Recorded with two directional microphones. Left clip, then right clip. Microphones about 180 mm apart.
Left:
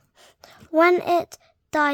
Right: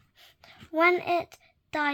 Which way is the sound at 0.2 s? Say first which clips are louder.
Left 4 dB; 50° left (ahead or behind).